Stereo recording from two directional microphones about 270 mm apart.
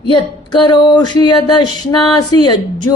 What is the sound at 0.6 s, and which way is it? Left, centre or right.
Speech, centre.